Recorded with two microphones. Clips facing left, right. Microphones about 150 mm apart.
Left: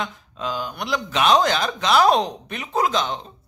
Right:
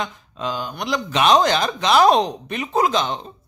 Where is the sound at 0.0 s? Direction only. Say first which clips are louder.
Right 2 dB; centre (ahead or behind).